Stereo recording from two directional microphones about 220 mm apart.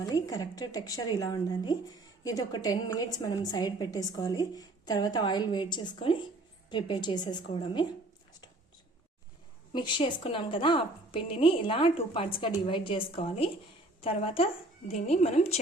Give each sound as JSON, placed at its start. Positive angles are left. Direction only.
{"t": 0.0, "sound": "a woman's voice", "side_deg": 15}
{"t": 9.7, "sound": "a woman's voice", "side_deg": 20}